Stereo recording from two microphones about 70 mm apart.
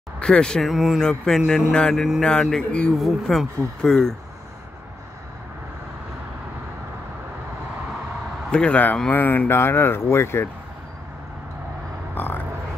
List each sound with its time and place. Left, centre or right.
0.2 s speech: centre
0.7 s speech: centre
3.0 s speech: centre
8.5 s speech: centre; by 10.5 s left
12.2 s a sound: left